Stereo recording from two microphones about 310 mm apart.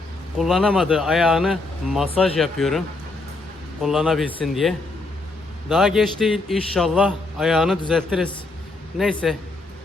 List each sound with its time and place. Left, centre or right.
0.3 s a man's voice: centre